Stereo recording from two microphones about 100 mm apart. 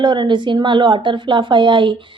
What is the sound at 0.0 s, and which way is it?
A woman's voice, 50° right (ahead or behind).